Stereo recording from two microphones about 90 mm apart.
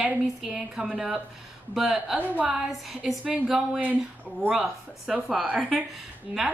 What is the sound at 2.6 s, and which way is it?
A woman's voice, 5° right (ahead or behind).